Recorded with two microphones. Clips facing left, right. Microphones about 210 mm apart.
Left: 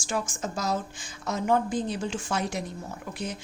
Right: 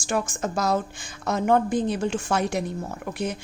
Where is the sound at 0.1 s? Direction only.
60° right (ahead or behind).